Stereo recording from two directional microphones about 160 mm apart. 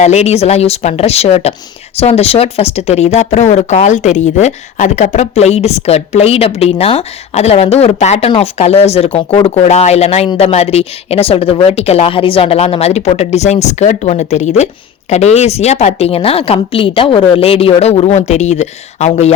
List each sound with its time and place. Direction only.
0.0 s speech: 45° left (ahead or behind)